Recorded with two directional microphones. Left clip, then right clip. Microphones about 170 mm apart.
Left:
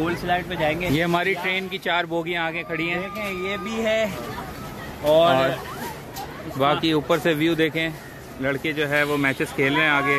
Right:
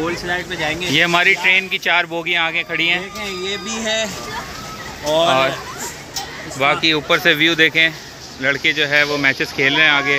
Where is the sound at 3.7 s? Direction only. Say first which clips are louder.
Right 1 dB; 90° left.